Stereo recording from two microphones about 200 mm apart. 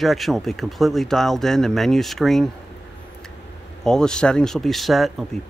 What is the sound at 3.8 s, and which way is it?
Speech, 5° left (ahead or behind).